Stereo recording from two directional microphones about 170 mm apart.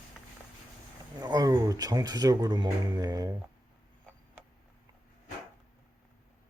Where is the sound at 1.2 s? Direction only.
20° right (ahead or behind).